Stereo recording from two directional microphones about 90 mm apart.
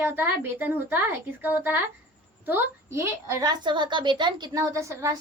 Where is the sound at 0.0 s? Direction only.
25° right (ahead or behind).